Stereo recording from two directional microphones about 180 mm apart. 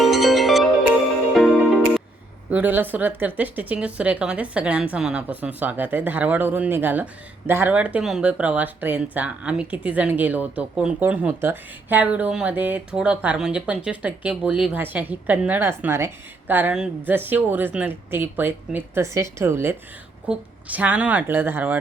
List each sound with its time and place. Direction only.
0.0 s music: centre (ahead or behind)
2.5 s speech: 10° right (ahead or behind)